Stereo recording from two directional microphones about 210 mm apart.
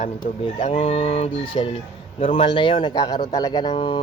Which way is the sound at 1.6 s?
25° left (ahead or behind).